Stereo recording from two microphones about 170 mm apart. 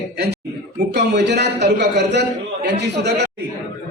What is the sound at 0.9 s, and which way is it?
A man's voice, 80° right.